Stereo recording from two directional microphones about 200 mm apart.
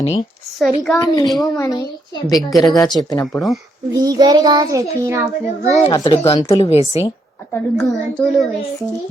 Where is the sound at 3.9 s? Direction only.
20° right (ahead or behind).